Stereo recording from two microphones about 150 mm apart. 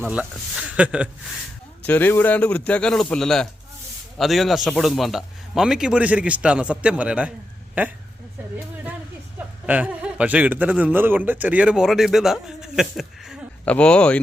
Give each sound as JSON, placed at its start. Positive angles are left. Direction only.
{"t": 0.0, "sound": "a man's voice", "side_deg": -10}
{"t": 1.8, "sound": "a man's voice", "side_deg": 10}
{"t": 8.5, "sound": "a man's voice", "side_deg": -10}